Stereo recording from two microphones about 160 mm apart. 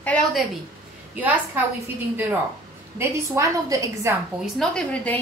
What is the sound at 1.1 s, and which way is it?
Speech, 10° right (ahead or behind).